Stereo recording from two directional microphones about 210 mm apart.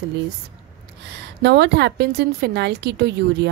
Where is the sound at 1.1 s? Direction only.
55° right (ahead or behind).